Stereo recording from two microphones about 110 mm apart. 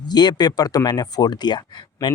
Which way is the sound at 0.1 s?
40° left (ahead or behind).